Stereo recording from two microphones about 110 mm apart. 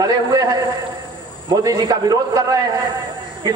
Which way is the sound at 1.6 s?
35° right (ahead or behind).